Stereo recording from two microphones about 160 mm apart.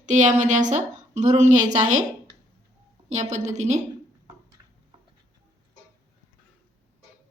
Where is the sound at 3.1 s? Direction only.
45° right (ahead or behind).